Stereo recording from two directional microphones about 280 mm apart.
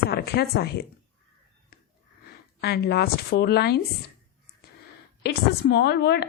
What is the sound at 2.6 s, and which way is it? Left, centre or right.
A woman's voice, left.